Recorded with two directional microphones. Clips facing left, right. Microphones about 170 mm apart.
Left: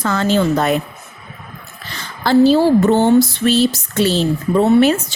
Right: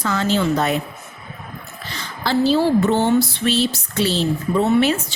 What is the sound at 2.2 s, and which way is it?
Speech, 50° left (ahead or behind).